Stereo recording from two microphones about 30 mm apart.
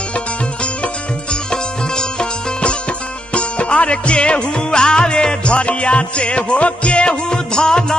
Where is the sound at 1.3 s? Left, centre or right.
Left.